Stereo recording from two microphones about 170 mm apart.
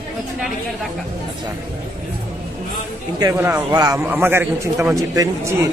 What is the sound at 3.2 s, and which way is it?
A man's voice, 15° right (ahead or behind).